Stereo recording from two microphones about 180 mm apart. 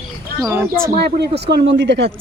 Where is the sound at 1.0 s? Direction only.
65° right (ahead or behind).